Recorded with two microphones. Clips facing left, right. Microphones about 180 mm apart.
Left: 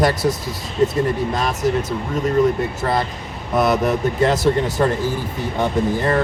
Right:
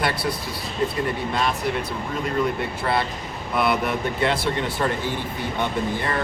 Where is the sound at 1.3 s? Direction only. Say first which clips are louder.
Left 4 dB; 40° left (ahead or behind).